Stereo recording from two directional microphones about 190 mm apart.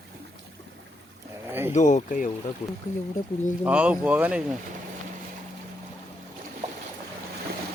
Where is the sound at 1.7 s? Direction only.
40° left (ahead or behind).